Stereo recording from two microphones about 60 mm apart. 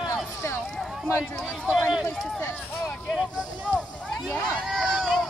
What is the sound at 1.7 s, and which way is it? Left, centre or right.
Run, centre.